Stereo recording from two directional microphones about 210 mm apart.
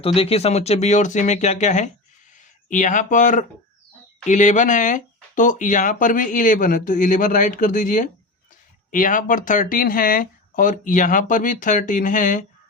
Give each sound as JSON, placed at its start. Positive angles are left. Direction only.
{"t": 0.0, "sound": "speech", "side_deg": 25}